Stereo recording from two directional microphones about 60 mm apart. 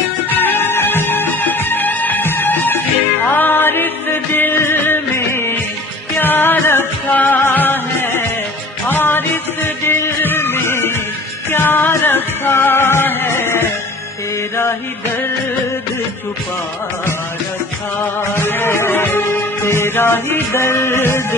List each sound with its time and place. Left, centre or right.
0.3 s music: left
18.3 s music: left